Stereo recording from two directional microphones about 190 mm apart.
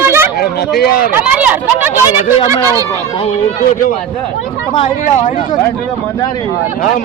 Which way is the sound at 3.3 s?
40° left (ahead or behind).